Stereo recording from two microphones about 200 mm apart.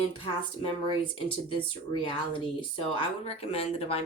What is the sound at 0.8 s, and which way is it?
Speech, 25° left (ahead or behind).